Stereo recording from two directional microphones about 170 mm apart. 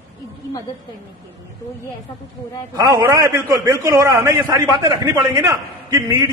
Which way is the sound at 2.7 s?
20° right (ahead or behind).